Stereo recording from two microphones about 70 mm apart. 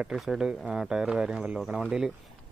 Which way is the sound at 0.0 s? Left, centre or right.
Centre.